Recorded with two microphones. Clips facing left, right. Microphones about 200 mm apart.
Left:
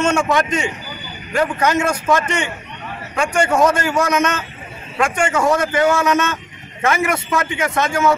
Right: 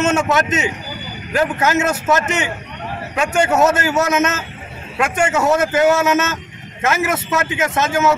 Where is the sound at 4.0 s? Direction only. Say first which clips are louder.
Right 1 dB; 25° right (ahead or behind).